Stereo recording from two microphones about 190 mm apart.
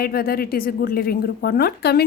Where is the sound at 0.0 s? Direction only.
50° left (ahead or behind).